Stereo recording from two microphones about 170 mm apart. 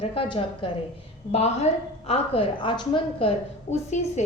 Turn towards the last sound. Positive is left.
turn(degrees=40)  # may be behind; listen again after turning